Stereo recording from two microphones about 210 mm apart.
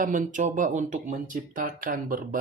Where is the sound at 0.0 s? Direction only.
40° right (ahead or behind).